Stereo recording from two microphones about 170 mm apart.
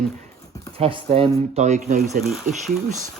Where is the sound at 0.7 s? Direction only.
35° right (ahead or behind).